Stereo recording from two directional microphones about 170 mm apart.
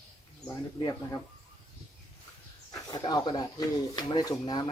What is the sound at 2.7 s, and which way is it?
Speech, 25° left (ahead or behind).